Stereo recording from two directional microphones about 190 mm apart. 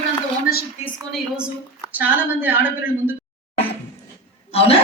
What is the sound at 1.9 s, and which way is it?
A woman's voice, 10° right (ahead or behind).